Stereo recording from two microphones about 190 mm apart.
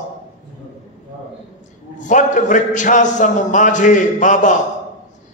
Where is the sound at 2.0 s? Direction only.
40° left (ahead or behind).